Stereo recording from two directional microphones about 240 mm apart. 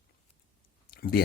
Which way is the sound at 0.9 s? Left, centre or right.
Left.